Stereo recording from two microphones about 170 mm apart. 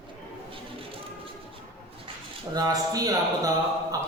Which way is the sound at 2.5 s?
20° right (ahead or behind).